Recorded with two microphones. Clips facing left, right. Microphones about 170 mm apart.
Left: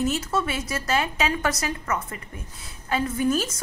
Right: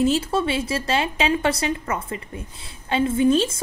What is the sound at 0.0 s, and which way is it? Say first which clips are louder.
A woman's voice: right 5 dB; 30° right (ahead or behind).